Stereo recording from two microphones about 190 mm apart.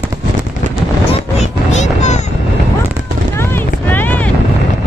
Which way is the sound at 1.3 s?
40° left (ahead or behind).